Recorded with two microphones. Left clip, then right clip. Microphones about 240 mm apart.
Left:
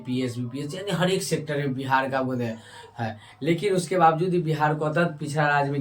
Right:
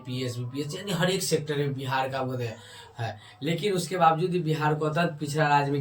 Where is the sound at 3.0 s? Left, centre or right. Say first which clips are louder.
Left 3 dB; centre.